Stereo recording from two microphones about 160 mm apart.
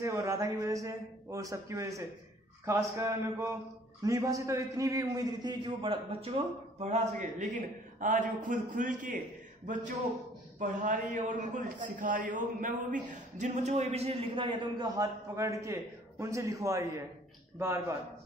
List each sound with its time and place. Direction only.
0.0 s a man's voice: 20° right (ahead or behind); by 9.2 s 55° right (ahead or behind)
10.6 s a man's voice: 55° right (ahead or behind); by 17.9 s 20° right (ahead or behind)